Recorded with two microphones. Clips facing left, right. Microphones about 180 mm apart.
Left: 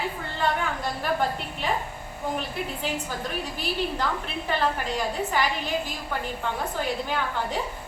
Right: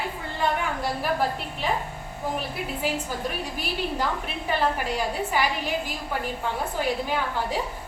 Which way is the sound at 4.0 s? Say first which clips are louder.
Right 1 dB; 10° right (ahead or behind).